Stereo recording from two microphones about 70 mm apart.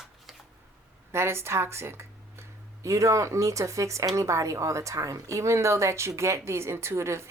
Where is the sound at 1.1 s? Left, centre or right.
Right.